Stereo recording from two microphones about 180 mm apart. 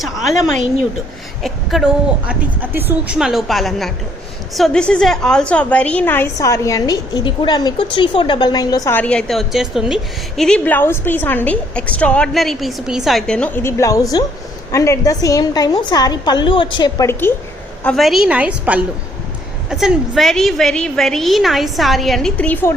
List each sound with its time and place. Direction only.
0.0 s a woman's voice: centre (ahead or behind); by 17.1 s 25° left (ahead or behind)
17.1 s a woman's voice: 10° left (ahead or behind)
17.8 s a woman's voice: centre (ahead or behind)